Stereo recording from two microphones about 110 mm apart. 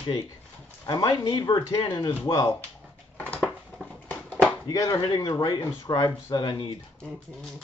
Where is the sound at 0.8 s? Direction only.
35° left (ahead or behind).